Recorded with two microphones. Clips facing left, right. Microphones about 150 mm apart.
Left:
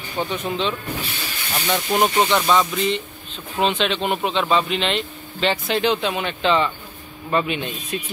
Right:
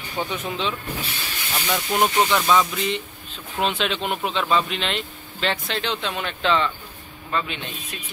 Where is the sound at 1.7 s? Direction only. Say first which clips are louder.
Left 2 dB; 5° left (ahead or behind).